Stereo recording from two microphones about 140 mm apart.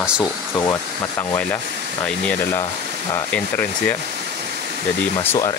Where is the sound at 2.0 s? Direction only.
10° left (ahead or behind).